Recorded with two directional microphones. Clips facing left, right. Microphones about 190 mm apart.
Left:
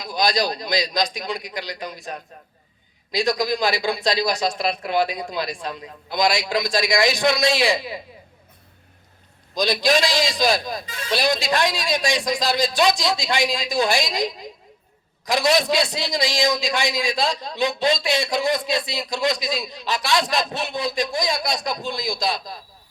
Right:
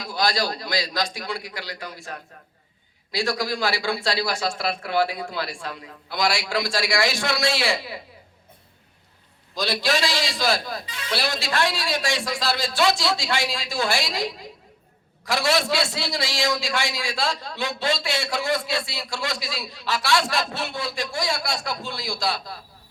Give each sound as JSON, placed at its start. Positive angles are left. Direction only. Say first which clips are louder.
{"t": 0.0, "sound": "a man's voice", "louder": "left 3 dB", "side_deg": 15}
{"t": 9.6, "sound": "a man's voice", "louder": "left 4 dB", "side_deg": 15}
{"t": 10.8, "sound": "speech", "louder": "left 3 dB", "side_deg": 45}
{"t": 11.1, "sound": "a man's voice", "louder": "left 5 dB", "side_deg": 15}